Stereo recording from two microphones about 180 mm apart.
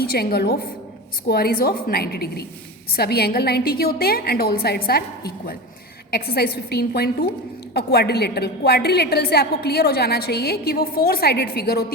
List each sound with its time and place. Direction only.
0.0 s a woman's voice: 60° left (ahead or behind)